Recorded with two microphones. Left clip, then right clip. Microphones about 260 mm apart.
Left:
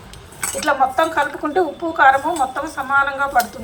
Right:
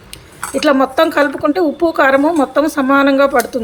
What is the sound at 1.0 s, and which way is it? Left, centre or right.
Speech, right.